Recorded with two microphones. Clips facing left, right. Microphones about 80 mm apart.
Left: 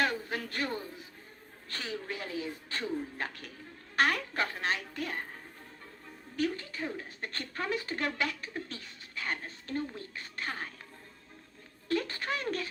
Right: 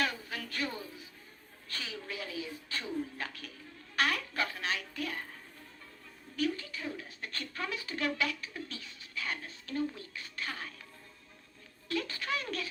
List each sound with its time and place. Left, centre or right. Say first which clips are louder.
0.0 s music: left 4 dB; left
1.6 s speech: left 4 dB; left
11.9 s speech: left 3 dB; left